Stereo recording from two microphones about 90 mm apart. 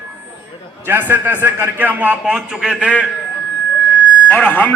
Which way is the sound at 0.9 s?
20° right (ahead or behind).